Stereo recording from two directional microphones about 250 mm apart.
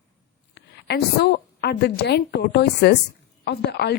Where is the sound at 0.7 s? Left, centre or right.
Left.